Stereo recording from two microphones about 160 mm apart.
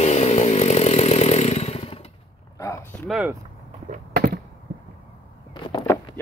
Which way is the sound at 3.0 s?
Centre (ahead or behind).